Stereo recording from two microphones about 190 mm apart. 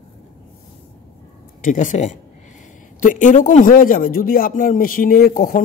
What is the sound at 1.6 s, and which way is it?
A man's voice, 40° left (ahead or behind).